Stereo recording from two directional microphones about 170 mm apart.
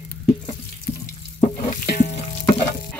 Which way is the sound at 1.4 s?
45° left (ahead or behind).